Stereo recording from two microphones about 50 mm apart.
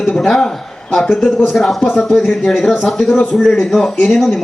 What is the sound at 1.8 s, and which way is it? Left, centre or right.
Speech, left.